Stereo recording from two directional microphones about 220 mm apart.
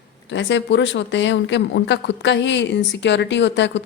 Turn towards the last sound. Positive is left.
turn(degrees=55)  # may be behind; listen again after turning